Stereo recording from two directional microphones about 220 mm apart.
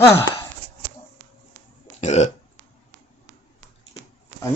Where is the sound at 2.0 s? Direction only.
30° left (ahead or behind).